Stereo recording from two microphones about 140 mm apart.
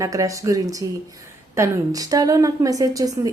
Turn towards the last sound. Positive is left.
turn(degrees=-25)  # may be behind; listen again after turning